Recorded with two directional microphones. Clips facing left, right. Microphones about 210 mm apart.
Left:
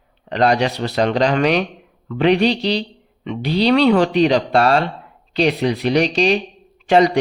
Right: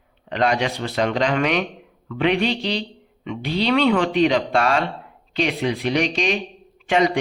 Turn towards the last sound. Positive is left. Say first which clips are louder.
# left 5 dB
turn(degrees=35)  # may be behind; listen again after turning